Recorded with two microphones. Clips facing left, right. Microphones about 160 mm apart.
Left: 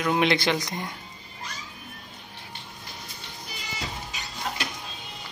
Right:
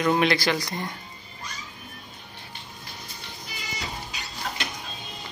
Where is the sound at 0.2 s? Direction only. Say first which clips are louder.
Even; 20° left (ahead or behind).